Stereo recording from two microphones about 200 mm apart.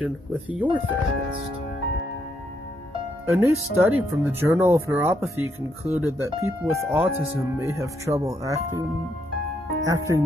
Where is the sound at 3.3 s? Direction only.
15° right (ahead or behind).